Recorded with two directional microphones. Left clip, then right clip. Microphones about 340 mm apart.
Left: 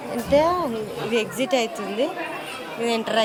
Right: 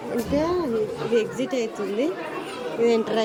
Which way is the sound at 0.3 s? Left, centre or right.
Centre.